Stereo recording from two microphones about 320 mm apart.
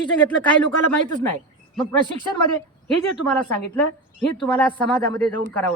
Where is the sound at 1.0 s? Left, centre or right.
Right.